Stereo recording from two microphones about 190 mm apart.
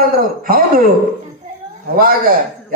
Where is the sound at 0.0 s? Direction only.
50° right (ahead or behind).